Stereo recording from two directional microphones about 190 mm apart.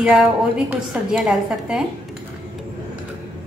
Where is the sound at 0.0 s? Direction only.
5° right (ahead or behind).